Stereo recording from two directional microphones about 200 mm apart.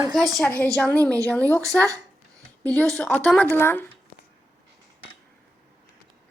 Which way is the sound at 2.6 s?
5° left (ahead or behind).